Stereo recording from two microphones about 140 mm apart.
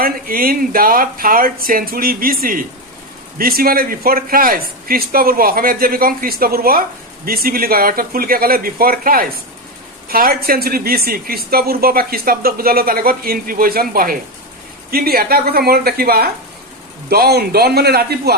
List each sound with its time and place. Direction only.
0.0 s speech: 90° right